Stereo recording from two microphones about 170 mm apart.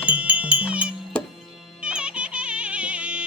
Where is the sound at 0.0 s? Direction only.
5° right (ahead or behind).